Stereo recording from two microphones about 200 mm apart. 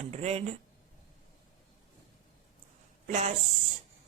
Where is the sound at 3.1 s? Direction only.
35° right (ahead or behind).